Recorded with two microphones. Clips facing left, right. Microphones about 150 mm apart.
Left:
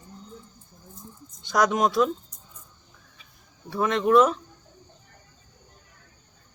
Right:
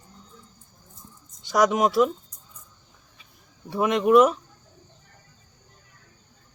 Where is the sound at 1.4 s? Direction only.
10° right (ahead or behind).